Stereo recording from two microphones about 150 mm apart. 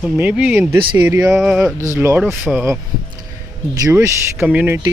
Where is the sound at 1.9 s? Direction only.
15° right (ahead or behind).